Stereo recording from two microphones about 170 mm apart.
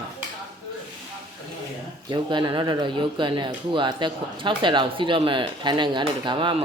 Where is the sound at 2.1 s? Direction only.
25° right (ahead or behind).